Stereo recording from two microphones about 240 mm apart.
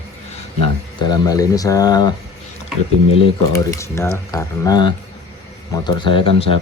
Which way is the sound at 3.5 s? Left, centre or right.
Centre.